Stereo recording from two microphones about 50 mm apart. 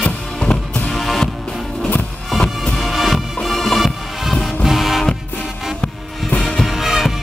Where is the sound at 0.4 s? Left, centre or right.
Centre.